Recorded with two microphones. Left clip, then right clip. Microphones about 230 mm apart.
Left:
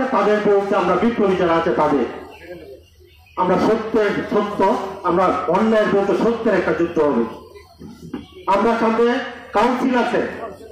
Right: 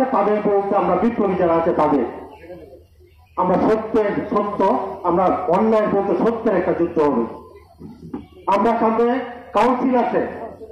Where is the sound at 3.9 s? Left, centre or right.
Left.